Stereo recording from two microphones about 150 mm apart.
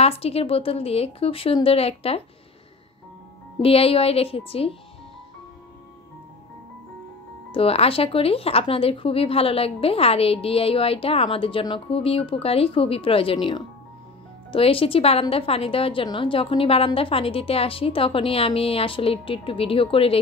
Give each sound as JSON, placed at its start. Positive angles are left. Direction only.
{"t": 0.0, "sound": "speech", "side_deg": 40}
{"t": 3.6, "sound": "speech", "side_deg": 40}
{"t": 7.5, "sound": "speech", "side_deg": 40}
{"t": 14.5, "sound": "speech", "side_deg": 40}